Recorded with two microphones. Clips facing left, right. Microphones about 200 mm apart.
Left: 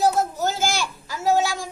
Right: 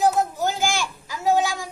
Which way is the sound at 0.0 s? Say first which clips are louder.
Even; 15° right (ahead or behind).